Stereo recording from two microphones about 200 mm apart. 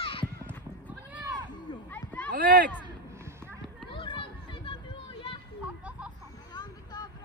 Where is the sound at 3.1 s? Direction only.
15° right (ahead or behind).